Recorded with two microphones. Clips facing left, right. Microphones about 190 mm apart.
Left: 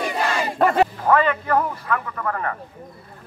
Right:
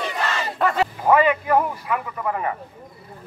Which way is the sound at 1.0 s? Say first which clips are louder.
Right 2 dB; 10° right (ahead or behind).